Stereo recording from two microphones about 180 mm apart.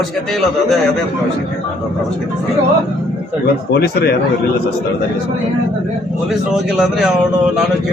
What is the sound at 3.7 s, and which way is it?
Speech, 60° left (ahead or behind).